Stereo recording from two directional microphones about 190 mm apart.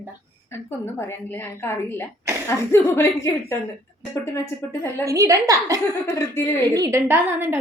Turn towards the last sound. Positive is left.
turn(degrees=-10)  # may be behind; listen again after turning